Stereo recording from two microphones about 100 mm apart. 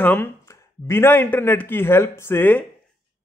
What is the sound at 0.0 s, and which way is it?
A man's voice, 20° left (ahead or behind).